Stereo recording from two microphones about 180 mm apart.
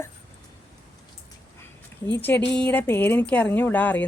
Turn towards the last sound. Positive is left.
turn(degrees=10)  # may be behind; listen again after turning